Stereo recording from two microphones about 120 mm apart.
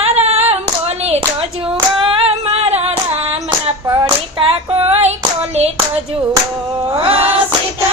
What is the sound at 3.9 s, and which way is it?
Hands, 35° right (ahead or behind).